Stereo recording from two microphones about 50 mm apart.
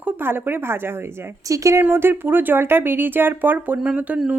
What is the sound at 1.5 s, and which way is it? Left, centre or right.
Speech, right.